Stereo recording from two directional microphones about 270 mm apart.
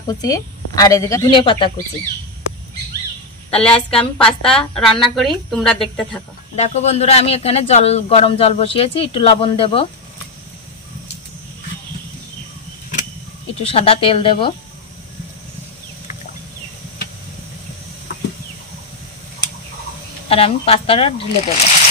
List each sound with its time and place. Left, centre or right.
0.0 s a woman's voice: centre
3.4 s a woman's voice: left
3.9 s speech: centre
6.5 s speech: left
13.6 s speech: left
20.2 s speech: left